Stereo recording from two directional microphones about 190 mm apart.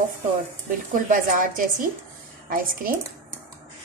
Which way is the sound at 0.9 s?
45° right (ahead or behind).